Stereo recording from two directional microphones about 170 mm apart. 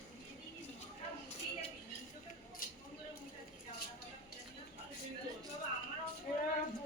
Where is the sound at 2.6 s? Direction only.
55° left (ahead or behind).